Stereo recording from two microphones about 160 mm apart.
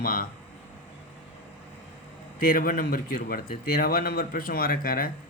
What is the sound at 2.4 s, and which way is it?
A man's voice, 60° left (ahead or behind).